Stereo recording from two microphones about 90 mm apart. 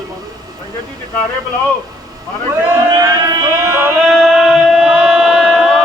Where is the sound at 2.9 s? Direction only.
45° right (ahead or behind).